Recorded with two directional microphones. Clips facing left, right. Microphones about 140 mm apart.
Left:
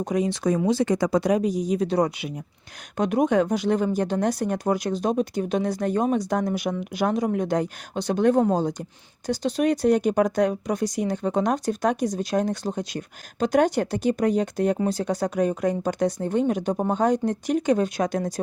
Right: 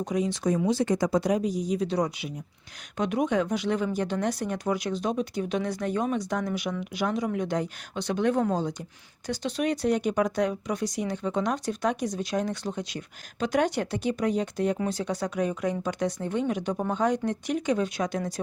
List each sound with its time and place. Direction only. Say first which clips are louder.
0.0 s speech: left 3 dB; 60° left (ahead or behind)
0.7 s speech: left 3 dB; 90° left; by 2.3 s 60° left (ahead or behind)
3.0 s speech: left 5 dB; 45° left (ahead or behind)